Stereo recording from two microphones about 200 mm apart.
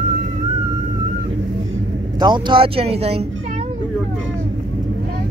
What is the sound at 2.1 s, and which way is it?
Speech, 20° right (ahead or behind).